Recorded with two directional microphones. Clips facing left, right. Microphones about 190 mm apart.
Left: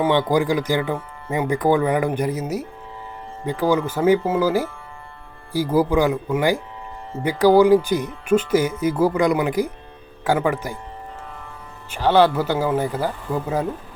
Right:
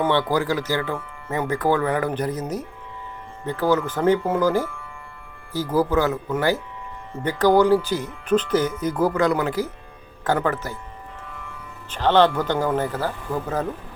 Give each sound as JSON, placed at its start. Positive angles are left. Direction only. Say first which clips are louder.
{"t": 0.0, "sound": "speech", "louder": "left 3 dB", "side_deg": 15}
{"t": 5.7, "sound": "speech", "louder": "left 2 dB", "side_deg": 10}
{"t": 11.9, "sound": "speech", "louder": "left 1 dB", "side_deg": 10}